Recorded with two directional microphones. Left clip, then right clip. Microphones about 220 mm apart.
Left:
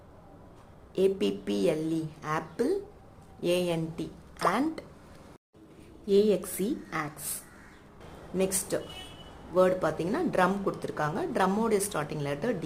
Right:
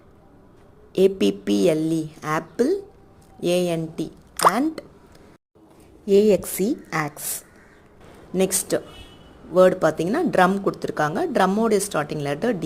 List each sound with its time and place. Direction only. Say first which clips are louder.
0.9 s a woman's voice: right 8 dB; 30° right (ahead or behind)
6.1 s a woman's voice: right 8 dB; 30° right (ahead or behind)
8.4 s a woman's voice: right 8 dB; 30° right (ahead or behind)